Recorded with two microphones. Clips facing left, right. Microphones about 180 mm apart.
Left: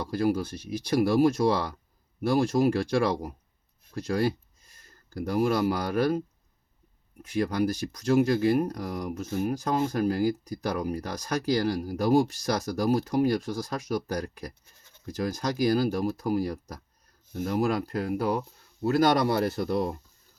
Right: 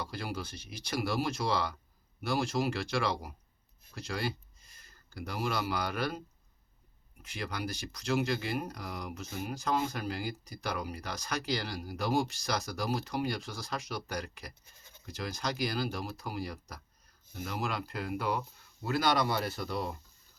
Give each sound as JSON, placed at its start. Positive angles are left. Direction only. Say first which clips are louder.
{"t": 0.0, "sound": "speech", "louder": "left 12 dB", "side_deg": 45}